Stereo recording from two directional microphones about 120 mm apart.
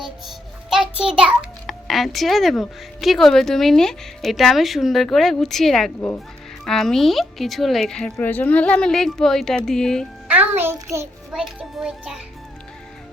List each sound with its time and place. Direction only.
0.0 s music: 5° right (ahead or behind)
1.6 s speech: centre (ahead or behind)
8.1 s speech: 15° left (ahead or behind)
10.2 s a child's voice: 15° right (ahead or behind)
11.3 s speech: 5° right (ahead or behind)